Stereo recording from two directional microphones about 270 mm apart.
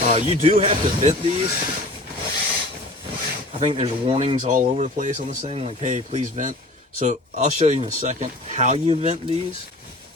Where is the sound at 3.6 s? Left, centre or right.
Right.